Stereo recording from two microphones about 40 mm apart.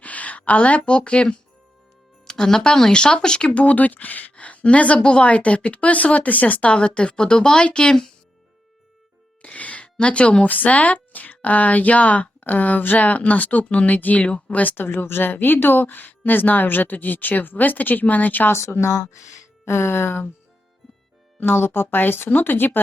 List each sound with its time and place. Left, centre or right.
0.0 s a woman's voice: left
2.2 s speech: centre
3.5 s speech: left; by 8.1 s centre
9.4 s sigh: left
10.4 s speech: left
14.3 s speech: left
14.8 s speech: left
19.6 s speech: left
21.4 s speech: left